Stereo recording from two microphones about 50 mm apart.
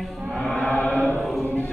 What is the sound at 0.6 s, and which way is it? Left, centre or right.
Chant, left.